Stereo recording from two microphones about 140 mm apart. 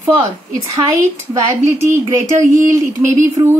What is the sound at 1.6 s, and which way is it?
A woman's voice, 20° right (ahead or behind).